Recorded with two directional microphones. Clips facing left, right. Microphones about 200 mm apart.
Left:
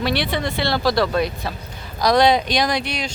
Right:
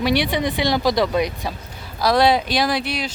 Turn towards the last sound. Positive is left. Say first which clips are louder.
# even
turn(degrees=-5)  # may be behind; listen again after turning